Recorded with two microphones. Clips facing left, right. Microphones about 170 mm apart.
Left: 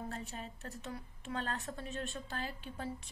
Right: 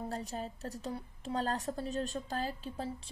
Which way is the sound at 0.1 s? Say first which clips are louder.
Right 5 dB; 35° right (ahead or behind).